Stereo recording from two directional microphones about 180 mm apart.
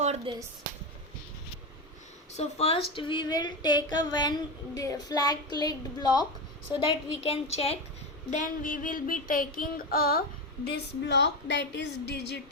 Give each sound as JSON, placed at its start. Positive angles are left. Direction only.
{"t": 0.3, "sound": "speech", "side_deg": -30}
{"t": 2.3, "sound": "a woman's voice", "side_deg": 35}
{"t": 2.9, "sound": "female singing", "side_deg": 30}
{"t": 6.7, "sound": "a woman's voice", "side_deg": 35}
{"t": 8.3, "sound": "a sound", "side_deg": 45}
{"t": 10.7, "sound": "a woman's voice", "side_deg": 70}